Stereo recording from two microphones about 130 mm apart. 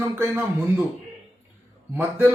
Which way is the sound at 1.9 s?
15° right (ahead or behind).